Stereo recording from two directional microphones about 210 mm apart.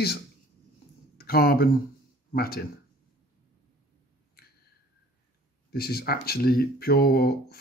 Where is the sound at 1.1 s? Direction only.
45° left (ahead or behind).